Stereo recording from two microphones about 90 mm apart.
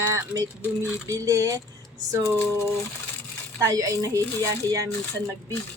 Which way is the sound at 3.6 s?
40° right (ahead or behind).